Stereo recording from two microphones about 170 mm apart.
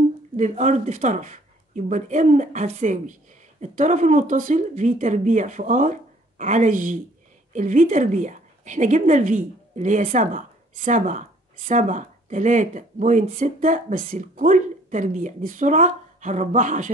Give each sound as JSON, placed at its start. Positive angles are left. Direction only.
{"t": 0.4, "sound": "speech", "side_deg": -45}